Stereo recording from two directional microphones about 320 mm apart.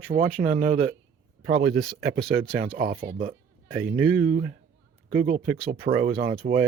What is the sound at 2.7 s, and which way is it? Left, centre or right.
Speech, right.